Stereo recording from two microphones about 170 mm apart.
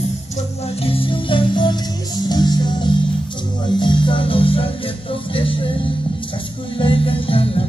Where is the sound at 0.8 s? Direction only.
30° left (ahead or behind).